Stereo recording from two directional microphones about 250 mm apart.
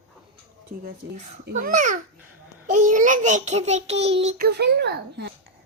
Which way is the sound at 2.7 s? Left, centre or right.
Right.